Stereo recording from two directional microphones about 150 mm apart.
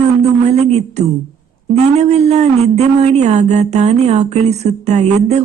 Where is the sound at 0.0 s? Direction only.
45° right (ahead or behind).